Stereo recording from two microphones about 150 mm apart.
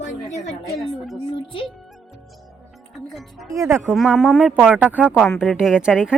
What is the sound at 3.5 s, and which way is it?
Speech, 20° right (ahead or behind).